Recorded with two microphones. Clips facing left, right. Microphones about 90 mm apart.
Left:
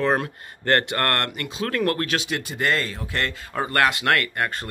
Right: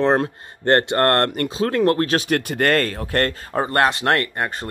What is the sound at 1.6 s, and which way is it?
Speech, 25° right (ahead or behind).